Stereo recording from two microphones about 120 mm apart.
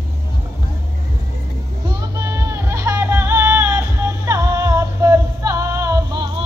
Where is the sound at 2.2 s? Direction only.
25° right (ahead or behind).